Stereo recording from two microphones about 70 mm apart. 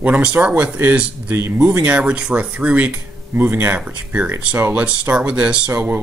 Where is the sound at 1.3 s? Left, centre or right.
Right.